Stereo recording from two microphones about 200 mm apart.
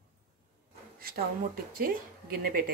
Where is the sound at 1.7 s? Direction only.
45° right (ahead or behind).